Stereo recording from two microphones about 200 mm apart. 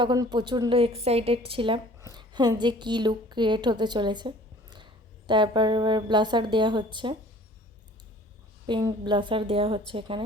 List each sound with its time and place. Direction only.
0.0 s a woman's voice: 20° right (ahead or behind)
8.6 s a woman's voice: 20° right (ahead or behind)